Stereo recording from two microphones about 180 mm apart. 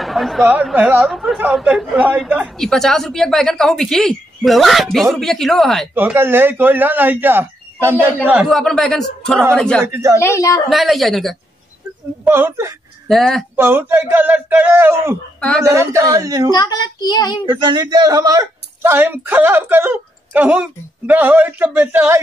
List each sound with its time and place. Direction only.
0.0 s a woman's voice: centre (ahead or behind)
5.9 s speech: 10° right (ahead or behind)
8.5 s a woman's voice: centre (ahead or behind)
9.8 s speech: 15° right (ahead or behind)
10.2 s a woman's voice: 15° left (ahead or behind)
10.7 s a woman's voice: centre (ahead or behind)
12.3 s speech: 15° right (ahead or behind)
13.1 s a woman's voice: centre (ahead or behind)
13.6 s speech: 10° right (ahead or behind)
16.5 s a child's voice: 25° left (ahead or behind)
17.5 s speech: 25° right (ahead or behind)